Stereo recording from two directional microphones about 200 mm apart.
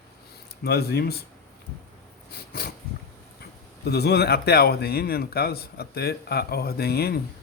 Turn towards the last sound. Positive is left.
turn(degrees=50)  # may be behind; listen again after turning